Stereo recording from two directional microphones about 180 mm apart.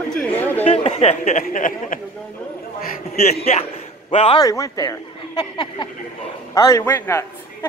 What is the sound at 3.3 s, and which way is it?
Speech, 35° left (ahead or behind).